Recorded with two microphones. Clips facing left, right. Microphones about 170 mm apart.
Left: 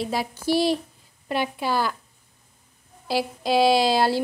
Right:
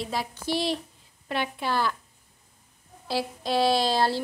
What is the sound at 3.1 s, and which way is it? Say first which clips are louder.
Speech: left 4 dB; 5° left (ahead or behind).